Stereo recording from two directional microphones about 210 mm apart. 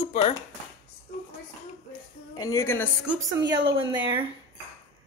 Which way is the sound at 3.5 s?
25° right (ahead or behind).